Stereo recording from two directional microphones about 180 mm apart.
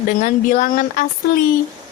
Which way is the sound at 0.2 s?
45° left (ahead or behind).